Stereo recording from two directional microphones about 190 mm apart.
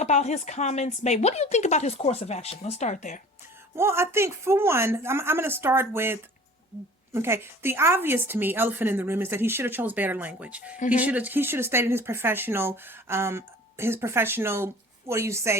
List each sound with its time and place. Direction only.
0.0 s a woman's voice: 35° left (ahead or behind)
3.8 s speech: 15° right (ahead or behind)